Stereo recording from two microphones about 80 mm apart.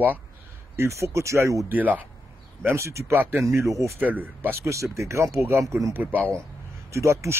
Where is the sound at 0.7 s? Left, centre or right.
Right.